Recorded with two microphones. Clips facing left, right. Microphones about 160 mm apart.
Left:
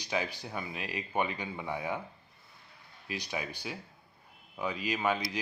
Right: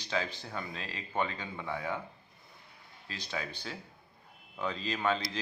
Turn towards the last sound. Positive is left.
turn(degrees=10)  # may be behind; listen again after turning